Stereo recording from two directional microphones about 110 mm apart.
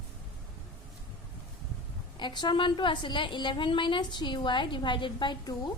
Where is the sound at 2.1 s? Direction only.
45° left (ahead or behind).